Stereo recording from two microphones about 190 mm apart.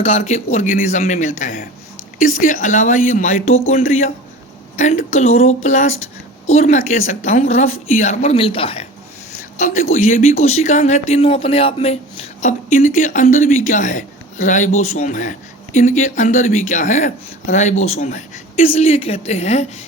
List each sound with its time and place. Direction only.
0.0 s speech: 30° left (ahead or behind)
6.5 s speech: 35° left (ahead or behind)
9.4 s speech: 45° left (ahead or behind)